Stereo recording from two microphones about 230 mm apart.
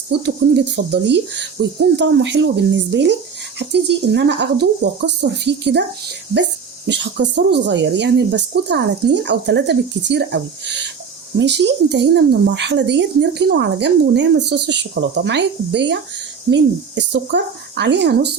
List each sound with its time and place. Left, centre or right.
0.1 s a woman's voice: right